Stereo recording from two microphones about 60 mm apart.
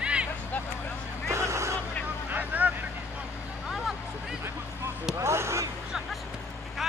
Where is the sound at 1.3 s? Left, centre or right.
Right.